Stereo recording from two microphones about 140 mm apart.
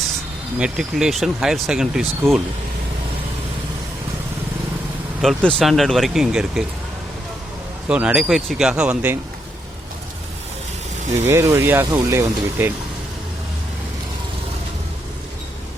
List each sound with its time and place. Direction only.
0.6 s speech: 5° right (ahead or behind)
5.2 s speech: 5° left (ahead or behind)
7.9 s speech: 10° right (ahead or behind)
11.2 s speech: 20° right (ahead or behind)